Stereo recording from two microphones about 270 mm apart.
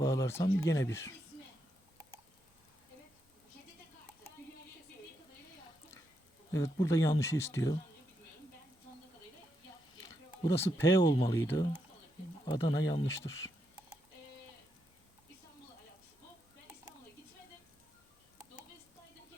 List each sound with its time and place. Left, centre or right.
0.0 s speech: centre
6.5 s speech: centre
10.4 s speech: centre